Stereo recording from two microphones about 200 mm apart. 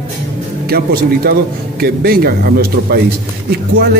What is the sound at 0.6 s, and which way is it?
Speech, 50° right (ahead or behind).